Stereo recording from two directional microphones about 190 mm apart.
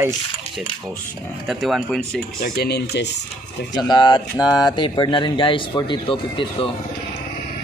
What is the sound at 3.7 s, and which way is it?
Speech, 20° left (ahead or behind).